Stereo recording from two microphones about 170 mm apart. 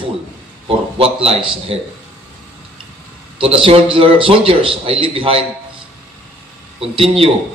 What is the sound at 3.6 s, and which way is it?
A man's voice, 30° right (ahead or behind).